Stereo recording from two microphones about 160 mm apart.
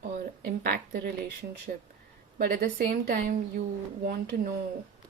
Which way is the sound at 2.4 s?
70° right (ahead or behind).